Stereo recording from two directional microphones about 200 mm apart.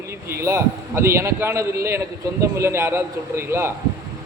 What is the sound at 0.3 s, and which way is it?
A man's voice, 15° right (ahead or behind).